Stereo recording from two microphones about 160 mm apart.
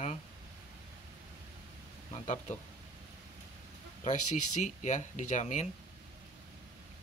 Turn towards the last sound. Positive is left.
turn(degrees=50)  # may be behind; listen again after turning